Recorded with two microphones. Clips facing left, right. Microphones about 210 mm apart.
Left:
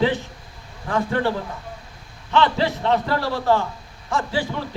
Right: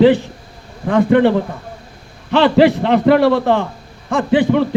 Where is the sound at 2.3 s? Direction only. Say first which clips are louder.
Right 9 dB; 75° right (ahead or behind).